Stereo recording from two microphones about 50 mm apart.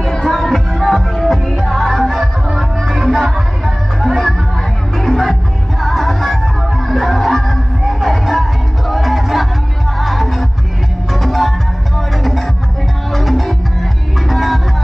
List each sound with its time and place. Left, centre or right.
0.0 s music: centre